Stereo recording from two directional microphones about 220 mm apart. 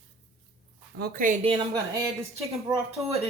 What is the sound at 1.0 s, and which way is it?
Speech, 40° right (ahead or behind).